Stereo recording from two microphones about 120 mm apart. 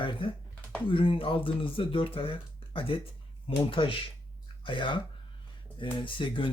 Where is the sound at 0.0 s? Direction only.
45° left (ahead or behind).